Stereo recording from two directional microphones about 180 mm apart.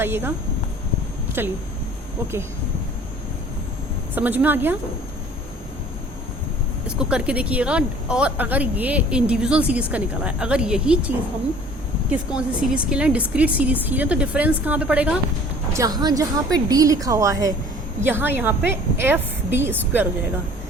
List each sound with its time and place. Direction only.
0.0 s speech: 10° right (ahead or behind)
1.4 s speech: 10° right (ahead or behind)
4.1 s speech: 10° right (ahead or behind)
7.0 s speech: 5° right (ahead or behind)
12.5 s speech: 5° right (ahead or behind)
15.7 s a woman's voice: 20° right (ahead or behind)